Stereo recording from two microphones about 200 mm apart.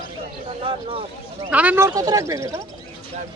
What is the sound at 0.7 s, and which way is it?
Speech, 25° right (ahead or behind).